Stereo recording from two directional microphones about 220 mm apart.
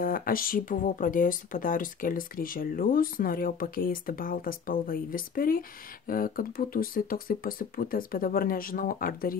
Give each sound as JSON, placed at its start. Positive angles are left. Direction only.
{"t": 0.0, "sound": "speech", "side_deg": 40}